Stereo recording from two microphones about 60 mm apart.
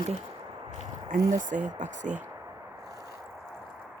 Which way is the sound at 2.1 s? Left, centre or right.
Centre.